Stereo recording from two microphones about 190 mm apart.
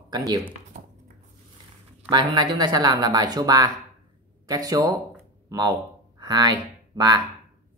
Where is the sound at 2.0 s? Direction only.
25° right (ahead or behind).